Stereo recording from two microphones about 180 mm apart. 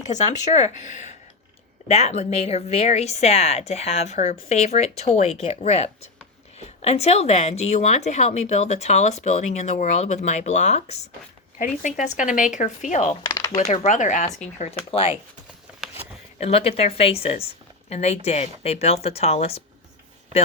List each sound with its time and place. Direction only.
0.1 s speech: 40° left (ahead or behind)
13.2 s speech: 20° left (ahead or behind)
13.8 s speech: 45° left (ahead or behind)
14.8 s speech: 30° left (ahead or behind)
16.4 s speech: 35° left (ahead or behind)